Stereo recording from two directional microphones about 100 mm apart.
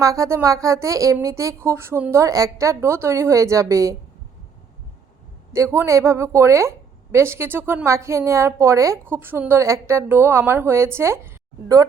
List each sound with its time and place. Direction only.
0.0 s speech: 30° right (ahead or behind)
5.5 s a woman's voice: 30° right (ahead or behind)